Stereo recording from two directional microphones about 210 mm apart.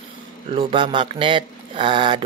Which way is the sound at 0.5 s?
25° right (ahead or behind).